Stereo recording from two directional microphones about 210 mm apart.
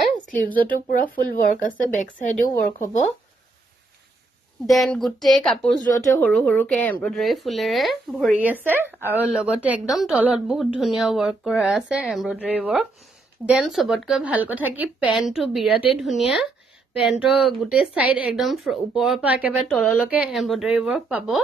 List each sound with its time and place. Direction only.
0.8 s speech: 40° left (ahead or behind)
4.6 s a woman's voice: centre (ahead or behind)